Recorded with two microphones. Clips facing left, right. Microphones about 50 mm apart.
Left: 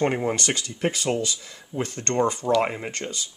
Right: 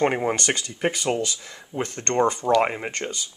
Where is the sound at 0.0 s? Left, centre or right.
Centre.